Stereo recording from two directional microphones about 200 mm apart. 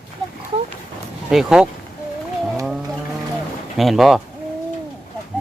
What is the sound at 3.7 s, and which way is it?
Speech, centre (ahead or behind).